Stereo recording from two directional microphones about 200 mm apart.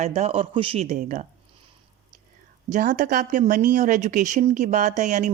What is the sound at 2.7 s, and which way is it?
A woman's voice, 40° right (ahead or behind).